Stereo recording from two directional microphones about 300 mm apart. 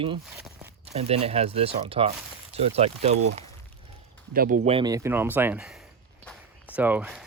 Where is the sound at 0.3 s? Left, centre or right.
Centre.